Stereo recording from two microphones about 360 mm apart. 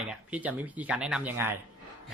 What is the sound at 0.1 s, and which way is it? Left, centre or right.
Speech, centre.